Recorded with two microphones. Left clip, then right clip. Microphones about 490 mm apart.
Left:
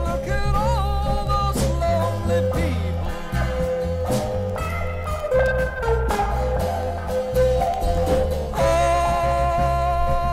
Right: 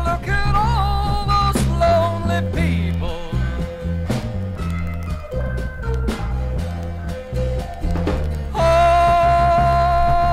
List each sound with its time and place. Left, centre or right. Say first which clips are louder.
0.0 s music: right 4 dB; right
8.7 s music: right 9 dB; right